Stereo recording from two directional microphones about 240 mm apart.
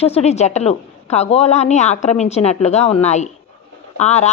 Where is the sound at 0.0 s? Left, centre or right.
Left.